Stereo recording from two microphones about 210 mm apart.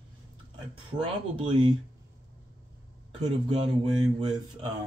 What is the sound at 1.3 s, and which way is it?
Speech, 25° right (ahead or behind).